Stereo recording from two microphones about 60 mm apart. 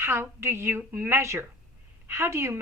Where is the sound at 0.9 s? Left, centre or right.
Right.